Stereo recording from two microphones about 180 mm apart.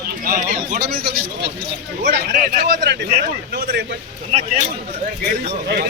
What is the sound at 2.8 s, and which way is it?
A man's voice, 65° right (ahead or behind).